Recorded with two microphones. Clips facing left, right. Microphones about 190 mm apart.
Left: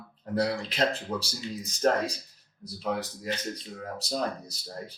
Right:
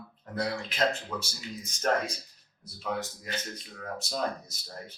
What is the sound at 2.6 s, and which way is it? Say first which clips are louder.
Speech: left 3 dB; 35° left (ahead or behind).